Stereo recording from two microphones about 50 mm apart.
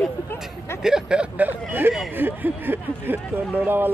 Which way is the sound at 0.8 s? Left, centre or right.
Centre.